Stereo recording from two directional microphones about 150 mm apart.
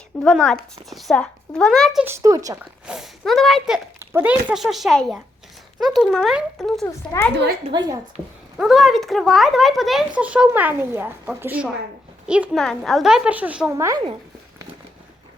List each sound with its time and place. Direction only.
0.2 s speech: 5° left (ahead or behind)
2.0 s speech: 20° right (ahead or behind)
2.8 s speech: 5° right (ahead or behind)
4.0 s speech: 15° right (ahead or behind); by 6.8 s centre (ahead or behind)
6.8 s a child's voice: 20° left (ahead or behind)
7.7 s speech: 30° right (ahead or behind)
8.1 s a woman's voice: 5° right (ahead or behind)
13.7 s speech: 20° right (ahead or behind)